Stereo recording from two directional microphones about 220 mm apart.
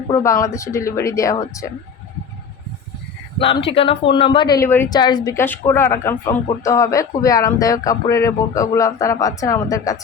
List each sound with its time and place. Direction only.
0.2 s speech: 15° left (ahead or behind)
3.4 s speech: 25° left (ahead or behind)